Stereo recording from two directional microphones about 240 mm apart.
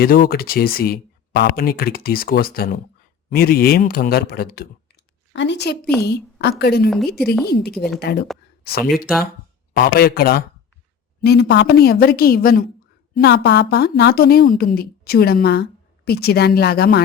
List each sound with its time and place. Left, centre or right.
0.0 s a woman's voice: left
5.8 s a woman's voice: centre
6.1 s a woman's voice: left